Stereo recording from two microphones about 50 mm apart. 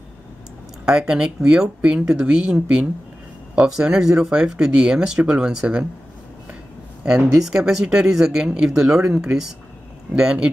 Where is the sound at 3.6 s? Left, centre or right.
Centre.